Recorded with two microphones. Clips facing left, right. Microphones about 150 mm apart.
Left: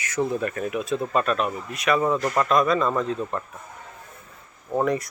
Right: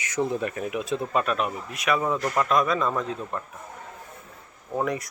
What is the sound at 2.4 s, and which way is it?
Speech, 5° right (ahead or behind).